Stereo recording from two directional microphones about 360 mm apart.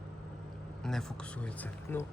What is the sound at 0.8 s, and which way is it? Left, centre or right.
Speech, centre.